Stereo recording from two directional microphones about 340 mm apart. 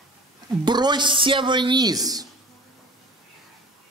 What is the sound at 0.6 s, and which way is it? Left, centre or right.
A woman's voice, centre.